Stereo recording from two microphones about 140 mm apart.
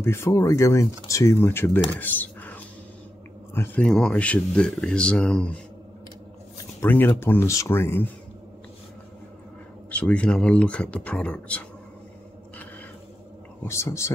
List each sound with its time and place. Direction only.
0.0 s speech: 20° left (ahead or behind)
1.9 s a sound: 15° left (ahead or behind)
3.5 s speech: 15° left (ahead or behind)
3.8 s speech: 5° left (ahead or behind)
6.8 s speech: 15° left (ahead or behind)
9.8 s speech: 10° left (ahead or behind)
13.7 s speech: 20° left (ahead or behind)